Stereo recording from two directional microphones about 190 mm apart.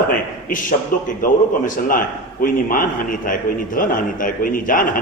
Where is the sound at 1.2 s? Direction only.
45° left (ahead or behind).